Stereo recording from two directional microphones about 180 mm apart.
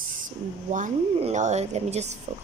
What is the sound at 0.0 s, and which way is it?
A woman's voice, 45° right (ahead or behind).